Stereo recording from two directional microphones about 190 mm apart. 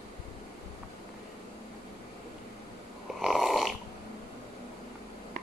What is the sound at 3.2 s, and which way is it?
Snoring, centre (ahead or behind).